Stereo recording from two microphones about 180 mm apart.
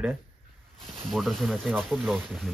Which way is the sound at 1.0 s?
Centre (ahead or behind).